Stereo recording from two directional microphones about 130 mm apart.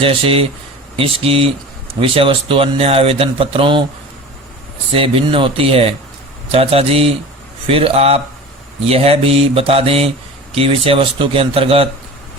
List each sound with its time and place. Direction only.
0.0 s speech: 45° right (ahead or behind)
4.9 s speech: 45° right (ahead or behind)